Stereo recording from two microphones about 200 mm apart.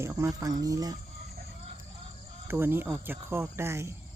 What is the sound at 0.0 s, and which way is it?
Speech, 15° right (ahead or behind).